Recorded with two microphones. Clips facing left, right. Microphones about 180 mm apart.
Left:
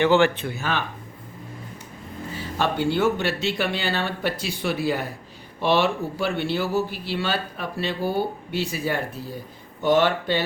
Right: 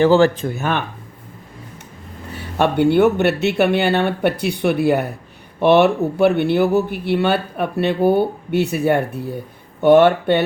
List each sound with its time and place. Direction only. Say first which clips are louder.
0.0 s speech: right 5 dB; 35° right (ahead or behind)
0.5 s speech: right 5 dB; 55° right (ahead or behind)
2.3 s speech: right 7 dB; 60° right (ahead or behind)